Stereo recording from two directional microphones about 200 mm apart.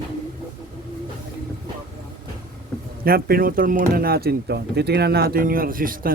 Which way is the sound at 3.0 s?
50° right (ahead or behind).